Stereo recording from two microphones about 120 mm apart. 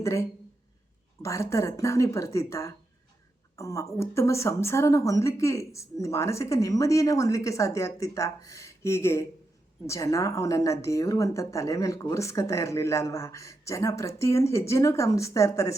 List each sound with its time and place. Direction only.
0.0 s a woman's voice: 25° left (ahead or behind)